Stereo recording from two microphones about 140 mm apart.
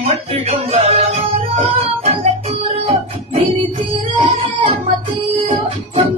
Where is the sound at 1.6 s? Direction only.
40° right (ahead or behind).